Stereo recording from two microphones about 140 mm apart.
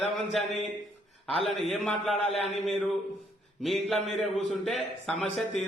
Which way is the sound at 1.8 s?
5° left (ahead or behind).